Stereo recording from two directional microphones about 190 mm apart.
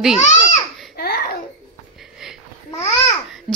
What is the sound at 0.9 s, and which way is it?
Babbling, 55° left (ahead or behind).